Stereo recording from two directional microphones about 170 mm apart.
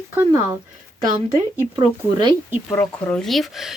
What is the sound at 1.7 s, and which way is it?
Speech, 25° right (ahead or behind).